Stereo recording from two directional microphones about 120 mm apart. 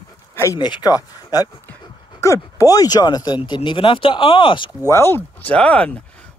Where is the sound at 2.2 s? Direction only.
25° left (ahead or behind); by 4.7 s 45° left (ahead or behind).